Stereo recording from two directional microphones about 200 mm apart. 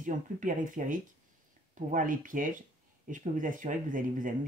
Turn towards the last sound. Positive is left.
turn(degrees=-40)  # may be behind; listen again after turning